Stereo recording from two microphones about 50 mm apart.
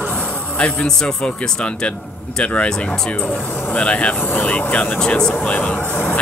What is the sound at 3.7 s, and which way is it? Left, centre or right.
Speech, left.